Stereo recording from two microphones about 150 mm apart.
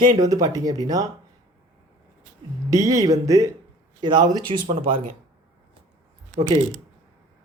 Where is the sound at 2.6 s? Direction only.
20° right (ahead or behind); by 5.0 s 40° right (ahead or behind).